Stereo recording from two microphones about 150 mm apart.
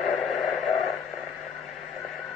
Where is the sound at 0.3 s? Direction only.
Centre (ahead or behind).